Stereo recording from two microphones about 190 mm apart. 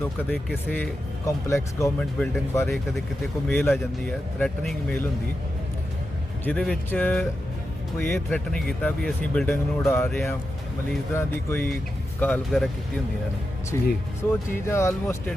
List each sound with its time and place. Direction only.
0.0 s speech: 10° left (ahead or behind)
6.4 s speech: 5° left (ahead or behind)
13.7 s speech: 15° left (ahead or behind)